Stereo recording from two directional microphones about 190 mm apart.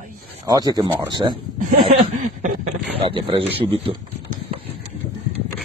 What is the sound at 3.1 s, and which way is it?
Speech, 25° right (ahead or behind).